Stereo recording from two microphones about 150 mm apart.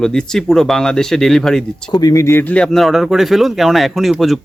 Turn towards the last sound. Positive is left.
turn(degrees=0)  # may be behind; listen again after turning